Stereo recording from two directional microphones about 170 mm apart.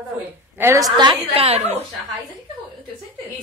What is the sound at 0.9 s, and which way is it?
Speech, 30° right (ahead or behind).